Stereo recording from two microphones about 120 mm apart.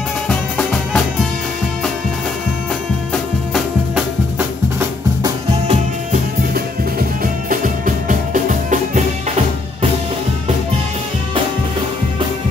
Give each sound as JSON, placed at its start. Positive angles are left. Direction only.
{"t": 0.3, "sound": "music", "side_deg": 5}
{"t": 3.9, "sound": "music", "side_deg": -20}
{"t": 7.8, "sound": "music", "side_deg": -90}